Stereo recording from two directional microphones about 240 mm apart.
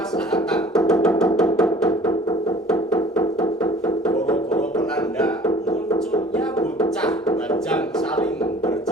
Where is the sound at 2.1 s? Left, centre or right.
Centre.